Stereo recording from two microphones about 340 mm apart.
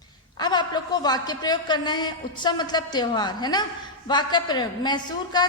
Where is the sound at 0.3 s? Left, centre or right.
Centre.